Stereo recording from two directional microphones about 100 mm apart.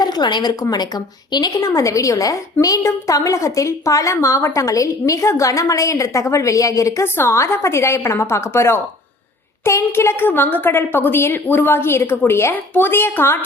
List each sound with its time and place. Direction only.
0.0 s a woman's voice: 45° left (ahead or behind); by 13.4 s 20° left (ahead or behind)